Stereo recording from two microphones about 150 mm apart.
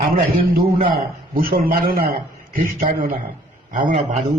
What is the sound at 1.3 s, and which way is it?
A man's voice, 70° right (ahead or behind).